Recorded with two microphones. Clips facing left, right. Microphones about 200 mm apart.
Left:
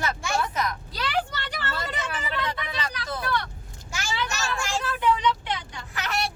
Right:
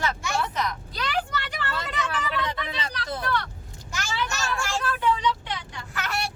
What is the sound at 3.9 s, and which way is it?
Child singing, 15° left (ahead or behind).